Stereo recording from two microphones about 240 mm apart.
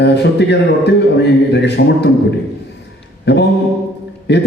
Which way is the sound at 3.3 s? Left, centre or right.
Left.